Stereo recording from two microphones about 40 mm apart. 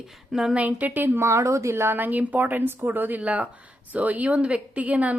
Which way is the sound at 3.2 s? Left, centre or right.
Right.